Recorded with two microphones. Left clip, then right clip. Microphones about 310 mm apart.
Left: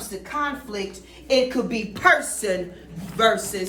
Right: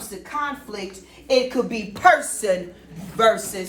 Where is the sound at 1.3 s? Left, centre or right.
Centre.